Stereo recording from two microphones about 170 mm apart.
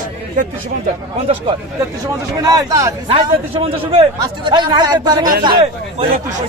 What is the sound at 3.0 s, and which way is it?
A man's voice, 35° right (ahead or behind).